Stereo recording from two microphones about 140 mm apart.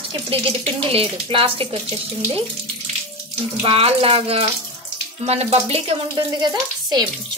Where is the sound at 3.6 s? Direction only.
40° right (ahead or behind).